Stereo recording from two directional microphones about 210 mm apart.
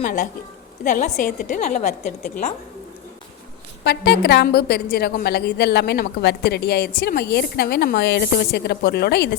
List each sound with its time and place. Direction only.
0.0 s a woman's voice: 40° left (ahead or behind)
3.8 s a woman's voice: 50° left (ahead or behind)